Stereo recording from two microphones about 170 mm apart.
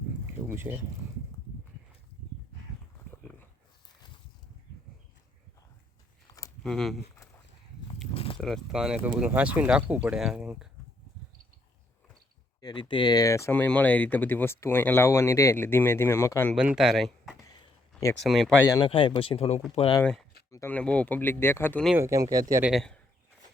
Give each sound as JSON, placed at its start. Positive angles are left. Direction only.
{"t": 0.5, "sound": "speech", "side_deg": -15}
{"t": 3.1, "sound": "a sound", "side_deg": 10}
{"t": 6.6, "sound": "speech", "side_deg": 0}
{"t": 8.1, "sound": "a sound", "side_deg": 35}
{"t": 8.4, "sound": "speech", "side_deg": 5}
{"t": 12.6, "sound": "speech", "side_deg": 30}
{"t": 16.6, "sound": "speech", "side_deg": -5}
{"t": 17.5, "sound": "a sound", "side_deg": 25}
{"t": 18.1, "sound": "speech", "side_deg": 0}
{"t": 18.6, "sound": "speech", "side_deg": 20}
{"t": 18.9, "sound": "speech", "side_deg": 30}
{"t": 20.5, "sound": "speech", "side_deg": 15}
{"t": 21.9, "sound": "speech", "side_deg": -20}
{"t": 22.6, "sound": "speech", "side_deg": 0}